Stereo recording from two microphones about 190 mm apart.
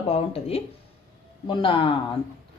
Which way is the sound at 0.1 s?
30° left (ahead or behind).